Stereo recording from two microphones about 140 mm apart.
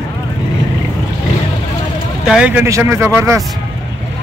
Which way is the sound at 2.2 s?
5° right (ahead or behind).